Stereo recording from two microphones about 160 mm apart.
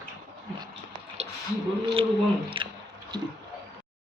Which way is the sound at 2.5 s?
30° right (ahead or behind).